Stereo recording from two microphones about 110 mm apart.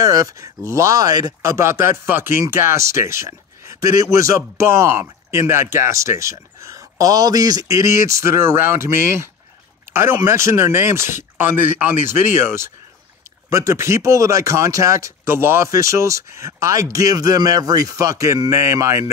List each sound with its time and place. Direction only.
0.0 s speech: 30° right (ahead or behind)